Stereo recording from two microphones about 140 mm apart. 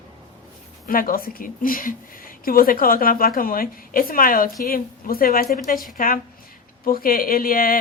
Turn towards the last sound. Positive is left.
turn(degrees=90)